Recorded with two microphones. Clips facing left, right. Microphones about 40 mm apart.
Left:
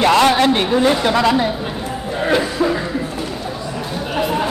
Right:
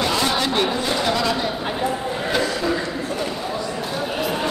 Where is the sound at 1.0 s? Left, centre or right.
Left.